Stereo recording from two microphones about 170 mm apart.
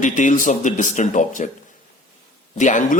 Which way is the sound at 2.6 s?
45° left (ahead or behind).